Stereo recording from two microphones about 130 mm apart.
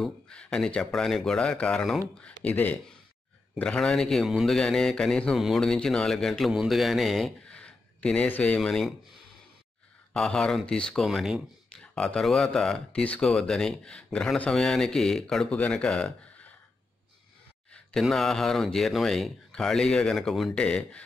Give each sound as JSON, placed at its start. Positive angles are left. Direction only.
{"t": 0.0, "sound": "a man's voice", "side_deg": 5}
{"t": 10.1, "sound": "a man's voice", "side_deg": 5}
{"t": 17.7, "sound": "a man's voice", "side_deg": 5}